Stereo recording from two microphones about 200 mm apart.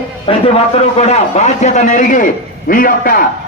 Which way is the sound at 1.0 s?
35° left (ahead or behind).